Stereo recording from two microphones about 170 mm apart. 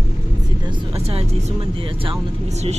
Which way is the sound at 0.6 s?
30° right (ahead or behind).